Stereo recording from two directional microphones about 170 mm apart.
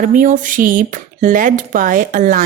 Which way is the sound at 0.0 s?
50° right (ahead or behind).